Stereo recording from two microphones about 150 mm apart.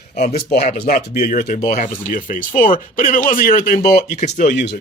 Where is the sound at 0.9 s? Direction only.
75° left (ahead or behind).